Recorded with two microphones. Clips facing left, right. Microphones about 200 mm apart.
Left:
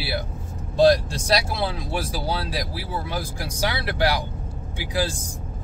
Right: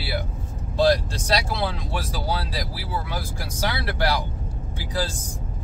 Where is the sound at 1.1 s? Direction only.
10° left (ahead or behind).